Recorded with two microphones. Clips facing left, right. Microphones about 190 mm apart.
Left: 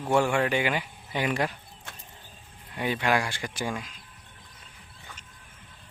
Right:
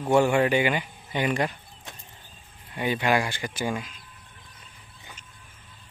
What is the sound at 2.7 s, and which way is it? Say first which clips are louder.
Speech: right 2 dB; centre (ahead or behind).